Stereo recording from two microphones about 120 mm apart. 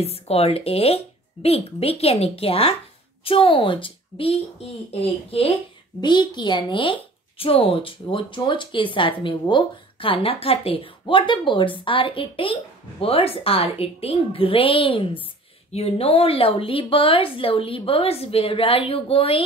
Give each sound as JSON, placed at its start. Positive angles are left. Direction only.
{"t": 0.0, "sound": "speech", "side_deg": 55}
{"t": 5.9, "sound": "speech", "side_deg": 40}